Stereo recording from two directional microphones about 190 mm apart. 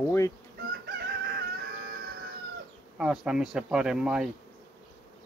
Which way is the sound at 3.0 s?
5° right (ahead or behind).